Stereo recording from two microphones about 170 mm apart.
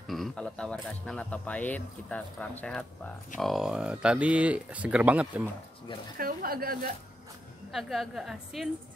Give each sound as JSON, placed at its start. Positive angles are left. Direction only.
{"t": 0.0, "sound": "a sound", "side_deg": 0}
{"t": 0.8, "sound": "speech", "side_deg": 5}
{"t": 6.1, "sound": "speech", "side_deg": -60}
{"t": 7.7, "sound": "a woman's voice", "side_deg": 0}